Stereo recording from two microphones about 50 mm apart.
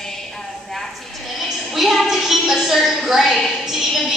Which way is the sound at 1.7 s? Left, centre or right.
Centre.